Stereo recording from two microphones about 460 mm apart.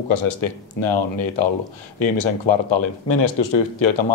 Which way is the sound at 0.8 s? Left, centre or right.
Left.